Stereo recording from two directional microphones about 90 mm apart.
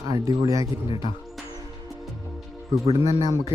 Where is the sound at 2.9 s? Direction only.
40° right (ahead or behind).